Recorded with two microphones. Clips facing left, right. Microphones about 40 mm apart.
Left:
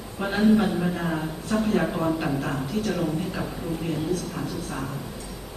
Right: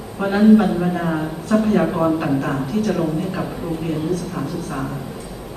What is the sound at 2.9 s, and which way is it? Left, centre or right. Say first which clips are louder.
Speech: right 5 dB; centre.